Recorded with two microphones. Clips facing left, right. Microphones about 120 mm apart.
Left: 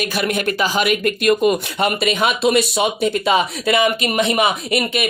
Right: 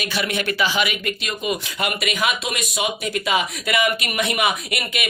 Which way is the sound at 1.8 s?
30° left (ahead or behind).